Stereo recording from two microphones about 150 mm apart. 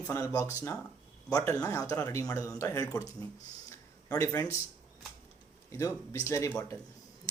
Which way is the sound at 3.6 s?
20° left (ahead or behind).